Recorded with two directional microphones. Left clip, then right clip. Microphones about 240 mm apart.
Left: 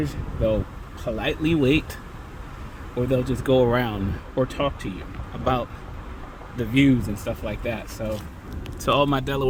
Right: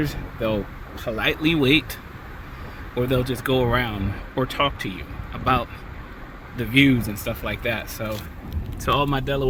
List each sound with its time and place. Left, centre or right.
0.0 s speech: centre
2.9 s speech: centre
4.4 s speech: centre
5.5 s speech: centre
8.8 s speech: centre